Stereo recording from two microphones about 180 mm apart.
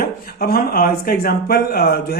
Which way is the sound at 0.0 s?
55° left (ahead or behind).